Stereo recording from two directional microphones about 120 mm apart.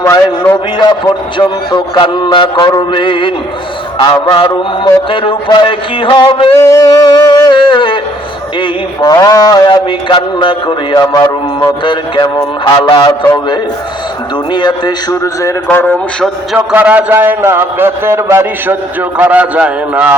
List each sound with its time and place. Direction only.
1.4 s music: 40° left (ahead or behind)
2.9 s a man's voice: 45° left (ahead or behind)
6.6 s music: 25° left (ahead or behind)
7.5 s a sound: 45° left (ahead or behind)
9.0 s music: 30° left (ahead or behind)
15.1 s a man's voice: 25° left (ahead or behind)
15.6 s speech: 15° left (ahead or behind)
16.6 s a man's voice: 15° right (ahead or behind)